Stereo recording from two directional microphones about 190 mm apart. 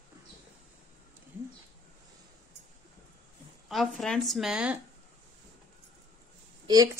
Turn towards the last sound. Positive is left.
turn(degrees=-20)  # may be behind; listen again after turning